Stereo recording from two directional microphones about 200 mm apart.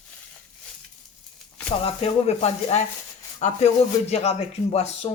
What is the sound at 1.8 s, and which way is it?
Speech, 30° left (ahead or behind).